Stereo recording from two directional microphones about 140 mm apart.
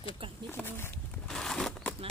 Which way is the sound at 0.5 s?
15° left (ahead or behind).